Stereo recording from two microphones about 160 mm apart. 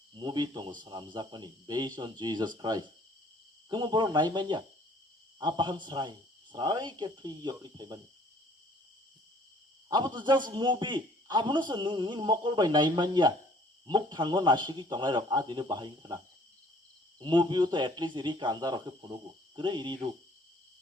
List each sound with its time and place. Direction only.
0.1 s a man's voice: 30° right (ahead or behind)
9.9 s a man's voice: 30° right (ahead or behind)